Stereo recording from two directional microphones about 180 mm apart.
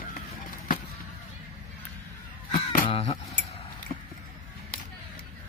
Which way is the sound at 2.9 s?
35° left (ahead or behind).